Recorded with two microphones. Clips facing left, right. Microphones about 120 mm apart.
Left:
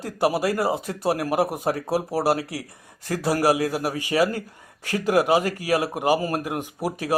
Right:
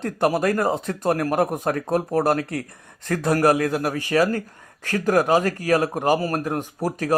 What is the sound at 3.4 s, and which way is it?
Speech, 50° right (ahead or behind).